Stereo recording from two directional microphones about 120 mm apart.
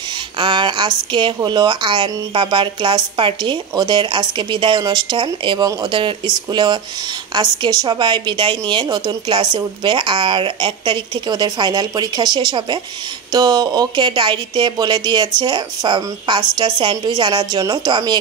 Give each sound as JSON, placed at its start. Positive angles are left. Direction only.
{"t": 0.4, "sound": "a woman's voice", "side_deg": -40}